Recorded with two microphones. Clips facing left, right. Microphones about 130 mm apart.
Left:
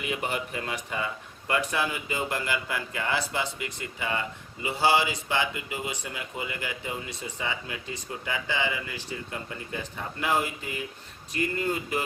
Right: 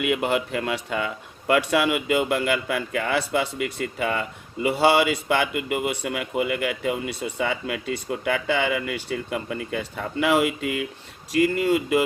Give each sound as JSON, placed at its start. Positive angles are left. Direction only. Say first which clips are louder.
{"t": 0.0, "sound": "speech", "louder": "right 8 dB", "side_deg": -75}